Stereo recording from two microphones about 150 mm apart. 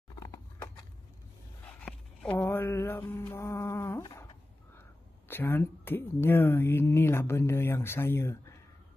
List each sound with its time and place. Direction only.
0.1 s horse: 20° left (ahead or behind)
1.8 s a sound: 10° left (ahead or behind)
5.3 s speech: 15° left (ahead or behind)